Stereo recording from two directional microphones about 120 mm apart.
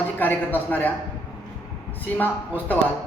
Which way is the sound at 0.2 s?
15° left (ahead or behind).